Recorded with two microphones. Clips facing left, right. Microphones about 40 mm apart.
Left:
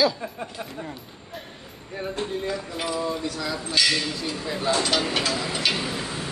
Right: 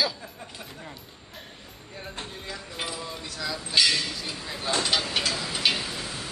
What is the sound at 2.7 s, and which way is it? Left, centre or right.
Speech, centre.